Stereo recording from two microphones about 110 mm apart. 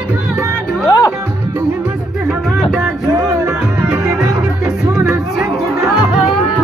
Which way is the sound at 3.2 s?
30° right (ahead or behind).